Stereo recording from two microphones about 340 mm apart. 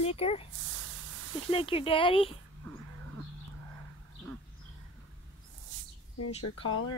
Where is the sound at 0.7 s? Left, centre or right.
Right.